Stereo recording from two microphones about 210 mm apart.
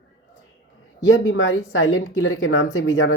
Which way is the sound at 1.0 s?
65° left (ahead or behind).